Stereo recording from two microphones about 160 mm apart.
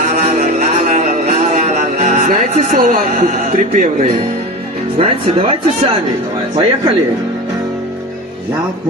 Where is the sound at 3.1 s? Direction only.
50° right (ahead or behind).